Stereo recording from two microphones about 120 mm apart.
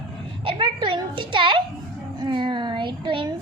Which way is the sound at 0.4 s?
45° right (ahead or behind).